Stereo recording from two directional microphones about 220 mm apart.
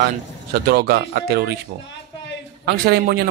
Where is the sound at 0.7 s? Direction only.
45° right (ahead or behind).